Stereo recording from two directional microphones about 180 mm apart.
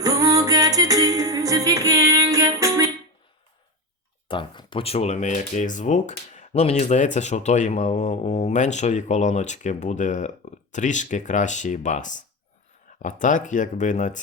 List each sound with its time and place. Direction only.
0.0 s music: 20° right (ahead or behind)
4.3 s speech: 25° left (ahead or behind); by 14.2 s 45° left (ahead or behind)